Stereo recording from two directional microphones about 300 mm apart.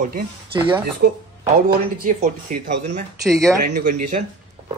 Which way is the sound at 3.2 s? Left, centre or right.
Centre.